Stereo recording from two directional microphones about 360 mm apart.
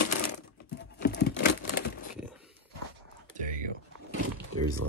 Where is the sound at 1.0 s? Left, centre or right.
Left.